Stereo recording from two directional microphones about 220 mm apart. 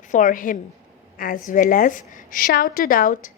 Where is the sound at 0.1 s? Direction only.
35° left (ahead or behind).